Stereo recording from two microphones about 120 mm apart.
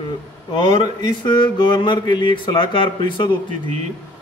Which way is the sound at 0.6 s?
40° left (ahead or behind).